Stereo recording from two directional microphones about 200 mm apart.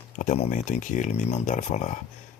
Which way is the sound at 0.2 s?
35° left (ahead or behind).